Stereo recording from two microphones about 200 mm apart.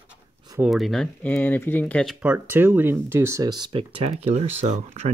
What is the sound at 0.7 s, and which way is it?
Speech, centre (ahead or behind).